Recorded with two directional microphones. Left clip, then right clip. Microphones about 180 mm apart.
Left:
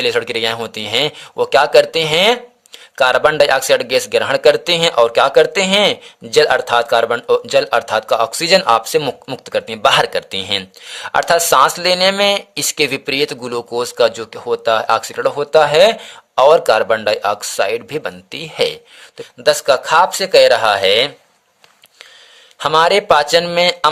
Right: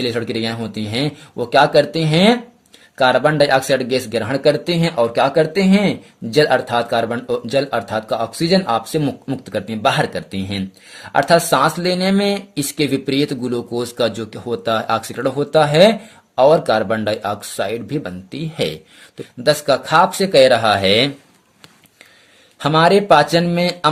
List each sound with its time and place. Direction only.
0.0 s speech: 40° left (ahead or behind)
22.5 s speech: 30° left (ahead or behind)